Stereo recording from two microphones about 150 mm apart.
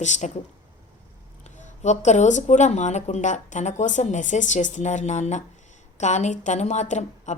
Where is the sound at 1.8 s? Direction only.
50° left (ahead or behind).